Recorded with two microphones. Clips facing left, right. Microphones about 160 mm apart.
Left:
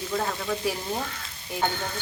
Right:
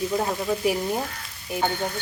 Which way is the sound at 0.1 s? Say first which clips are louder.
Right 4 dB; 20° right (ahead or behind).